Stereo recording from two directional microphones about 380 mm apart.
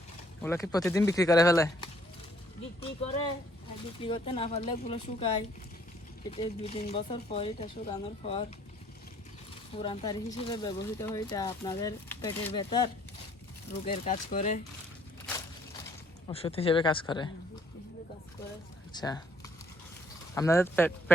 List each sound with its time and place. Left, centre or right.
0.4 s speech: centre
4.0 s speech: centre
6.3 s speech: centre
9.7 s speech: centre
16.3 s speech: centre
18.9 s speech: centre